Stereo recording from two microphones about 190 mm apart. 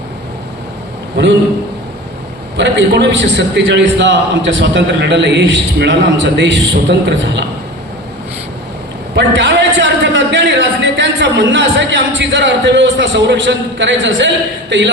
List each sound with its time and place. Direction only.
1.2 s a man's voice: 65° right (ahead or behind)
2.6 s a man's voice: 70° right (ahead or behind)
9.1 s a man's voice: 70° right (ahead or behind)